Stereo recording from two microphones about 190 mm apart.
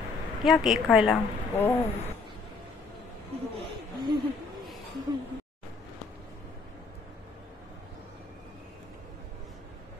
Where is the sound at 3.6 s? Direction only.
25° right (ahead or behind).